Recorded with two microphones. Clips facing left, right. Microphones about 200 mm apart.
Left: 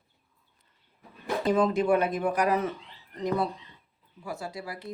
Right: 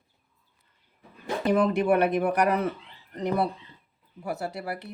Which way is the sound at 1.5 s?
65° right (ahead or behind).